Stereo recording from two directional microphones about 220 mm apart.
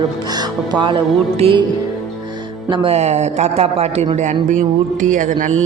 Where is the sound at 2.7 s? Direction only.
25° right (ahead or behind).